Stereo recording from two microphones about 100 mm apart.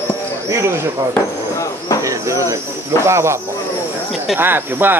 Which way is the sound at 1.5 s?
30° left (ahead or behind).